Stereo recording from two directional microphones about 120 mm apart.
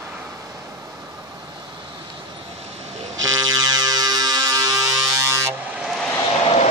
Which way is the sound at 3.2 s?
35° right (ahead or behind).